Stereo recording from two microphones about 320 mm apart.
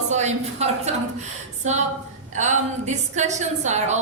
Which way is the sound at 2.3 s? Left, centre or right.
Right.